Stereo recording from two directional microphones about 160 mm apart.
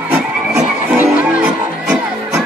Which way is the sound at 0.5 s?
10° right (ahead or behind).